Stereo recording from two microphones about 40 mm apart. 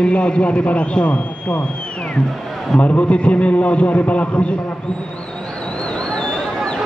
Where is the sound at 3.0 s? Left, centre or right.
Left.